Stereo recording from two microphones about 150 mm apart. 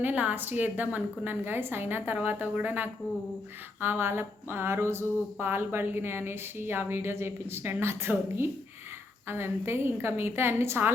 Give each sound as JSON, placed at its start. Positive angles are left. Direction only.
{"t": 0.0, "sound": "speech", "side_deg": -10}